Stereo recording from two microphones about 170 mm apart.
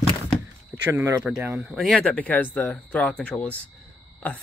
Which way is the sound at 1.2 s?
Centre (ahead or behind).